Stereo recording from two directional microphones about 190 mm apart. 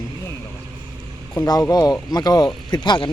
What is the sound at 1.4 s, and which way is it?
Speech, 20° left (ahead or behind).